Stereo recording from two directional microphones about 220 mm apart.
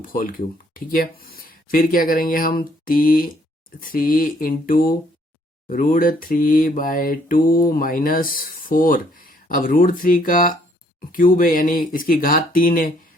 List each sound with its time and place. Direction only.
0.0 s mantra: 40° left (ahead or behind)